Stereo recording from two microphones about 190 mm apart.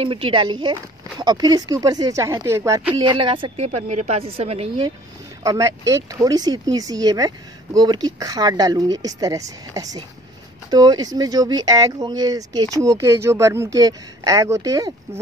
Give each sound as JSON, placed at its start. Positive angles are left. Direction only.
{"t": 0.0, "sound": "a woman's voice", "side_deg": -30}
{"t": 5.4, "sound": "speech", "side_deg": -15}